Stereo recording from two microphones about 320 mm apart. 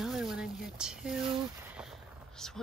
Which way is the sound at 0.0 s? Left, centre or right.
Centre.